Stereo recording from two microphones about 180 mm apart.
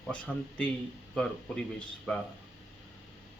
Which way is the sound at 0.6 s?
5° left (ahead or behind).